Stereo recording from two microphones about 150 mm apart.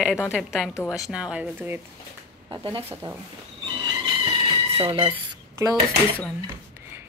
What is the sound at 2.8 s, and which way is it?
Speech, 15° right (ahead or behind).